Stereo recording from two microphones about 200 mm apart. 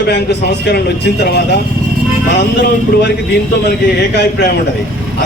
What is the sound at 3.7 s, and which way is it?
Speech, 55° left (ahead or behind).